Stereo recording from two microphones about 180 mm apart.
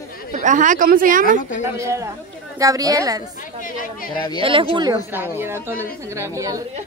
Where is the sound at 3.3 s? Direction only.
50° left (ahead or behind).